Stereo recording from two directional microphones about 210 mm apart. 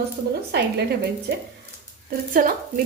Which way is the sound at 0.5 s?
50° right (ahead or behind).